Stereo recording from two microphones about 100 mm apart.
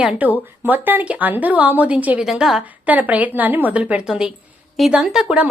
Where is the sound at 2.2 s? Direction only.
5° right (ahead or behind).